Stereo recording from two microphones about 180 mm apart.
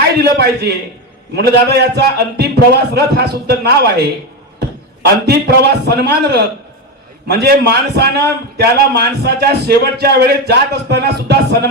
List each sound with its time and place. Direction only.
0.2 s a man's voice: 65° right (ahead or behind)